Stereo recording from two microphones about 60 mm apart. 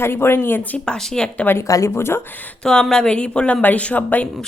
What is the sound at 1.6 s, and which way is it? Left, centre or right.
Speech, left.